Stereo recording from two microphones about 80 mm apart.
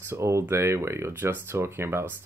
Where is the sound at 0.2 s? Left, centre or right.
Right.